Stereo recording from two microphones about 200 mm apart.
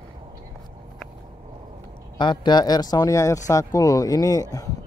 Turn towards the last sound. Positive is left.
turn(degrees=20)  # may be behind; listen again after turning